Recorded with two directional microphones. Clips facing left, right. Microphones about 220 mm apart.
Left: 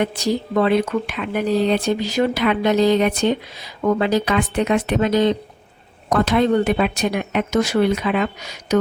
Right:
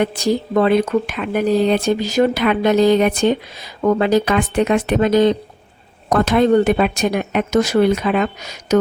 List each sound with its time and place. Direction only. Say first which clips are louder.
0.0 s speech: right 3 dB; 45° right (ahead or behind)